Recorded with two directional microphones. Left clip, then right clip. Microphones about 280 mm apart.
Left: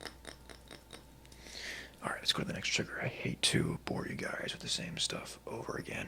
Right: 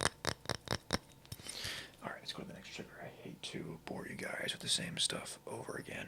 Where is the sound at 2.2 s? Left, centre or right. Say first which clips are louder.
Left 13 dB; left.